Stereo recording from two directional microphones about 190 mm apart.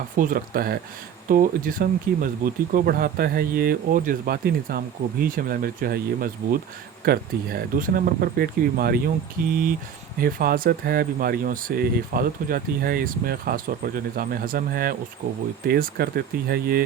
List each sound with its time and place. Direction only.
0.2 s speech: 50° right (ahead or behind)